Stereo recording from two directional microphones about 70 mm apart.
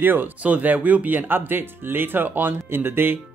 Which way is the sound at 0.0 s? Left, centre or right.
Right.